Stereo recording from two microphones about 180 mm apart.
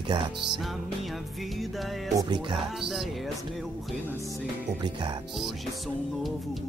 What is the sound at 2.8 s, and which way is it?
Speech, centre (ahead or behind).